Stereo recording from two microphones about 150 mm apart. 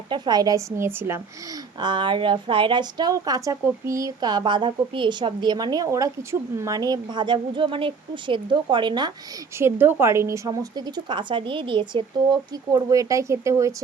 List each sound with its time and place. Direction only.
0.1 s a woman's voice: 25° right (ahead or behind)
1.8 s a woman's voice: 30° right (ahead or behind)
9.6 s a woman's voice: 15° right (ahead or behind)